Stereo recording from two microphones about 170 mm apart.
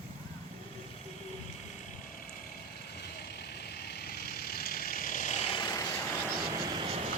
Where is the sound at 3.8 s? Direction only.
65° left (ahead or behind); by 5.8 s 25° left (ahead or behind).